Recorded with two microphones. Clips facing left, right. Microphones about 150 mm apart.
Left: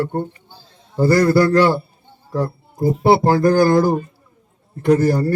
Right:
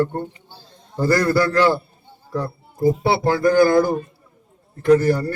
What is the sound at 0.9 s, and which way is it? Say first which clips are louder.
Speech: left 4 dB; 10° left (ahead or behind).